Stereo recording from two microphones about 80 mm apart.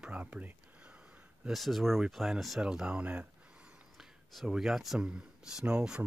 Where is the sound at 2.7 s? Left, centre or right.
Centre.